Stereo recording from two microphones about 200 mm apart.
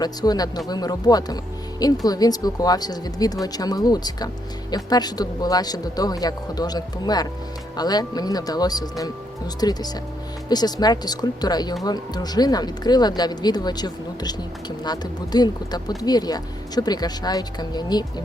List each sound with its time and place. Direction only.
0.0 s speech: 20° left (ahead or behind)